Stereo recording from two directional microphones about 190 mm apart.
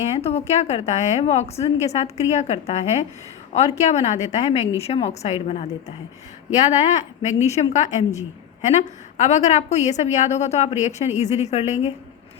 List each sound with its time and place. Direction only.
0.0 s a woman's voice: 35° left (ahead or behind)